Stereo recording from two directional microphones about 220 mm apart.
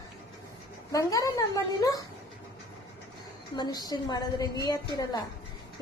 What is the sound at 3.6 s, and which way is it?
A woman's voice, 20° left (ahead or behind).